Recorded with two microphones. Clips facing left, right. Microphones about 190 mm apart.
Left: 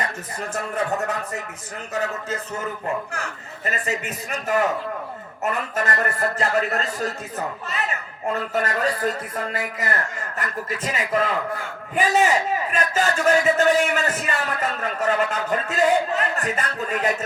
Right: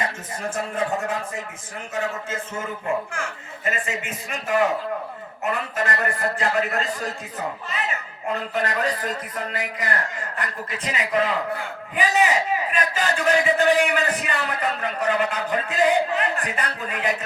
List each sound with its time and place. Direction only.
1.9 s a man's voice: 40° left (ahead or behind)
8.5 s a man's voice: 45° left (ahead or behind)